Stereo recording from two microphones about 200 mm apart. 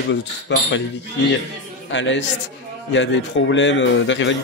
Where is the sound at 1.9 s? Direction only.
65° left (ahead or behind).